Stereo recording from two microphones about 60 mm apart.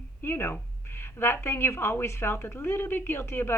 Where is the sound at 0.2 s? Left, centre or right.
Left.